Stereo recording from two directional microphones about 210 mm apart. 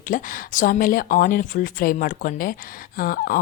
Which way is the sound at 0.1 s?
40° left (ahead or behind).